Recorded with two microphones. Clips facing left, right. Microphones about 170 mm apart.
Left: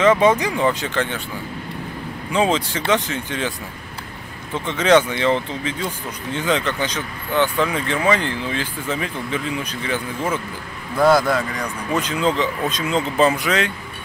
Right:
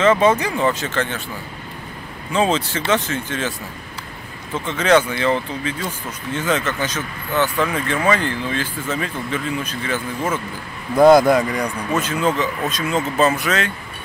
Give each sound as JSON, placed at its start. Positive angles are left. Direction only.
{"t": 0.0, "sound": "speech", "side_deg": 15}
{"t": 2.3, "sound": "speech", "side_deg": 15}
{"t": 4.6, "sound": "speech", "side_deg": 20}
{"t": 11.0, "sound": "speech", "side_deg": -20}
{"t": 11.9, "sound": "speech", "side_deg": 15}